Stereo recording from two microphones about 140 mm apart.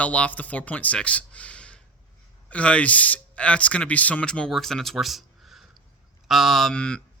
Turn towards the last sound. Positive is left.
turn(degrees=5)  # may be behind; listen again after turning